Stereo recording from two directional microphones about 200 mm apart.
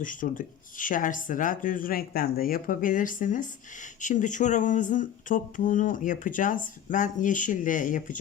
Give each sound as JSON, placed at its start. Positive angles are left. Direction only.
{"t": 0.0, "sound": "speech", "side_deg": 40}